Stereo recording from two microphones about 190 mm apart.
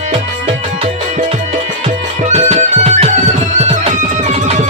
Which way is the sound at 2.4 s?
35° right (ahead or behind).